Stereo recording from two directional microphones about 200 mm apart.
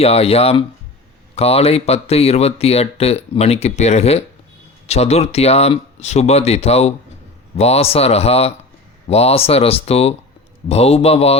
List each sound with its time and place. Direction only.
0.0 s speech: 30° left (ahead or behind)